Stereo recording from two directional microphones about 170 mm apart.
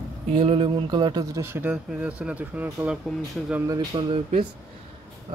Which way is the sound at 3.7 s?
25° right (ahead or behind).